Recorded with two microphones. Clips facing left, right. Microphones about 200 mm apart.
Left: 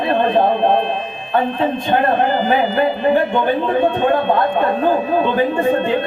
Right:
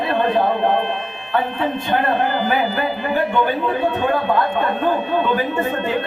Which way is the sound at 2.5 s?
25° left (ahead or behind).